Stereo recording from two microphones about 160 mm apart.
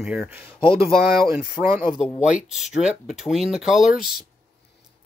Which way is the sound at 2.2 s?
5° right (ahead or behind).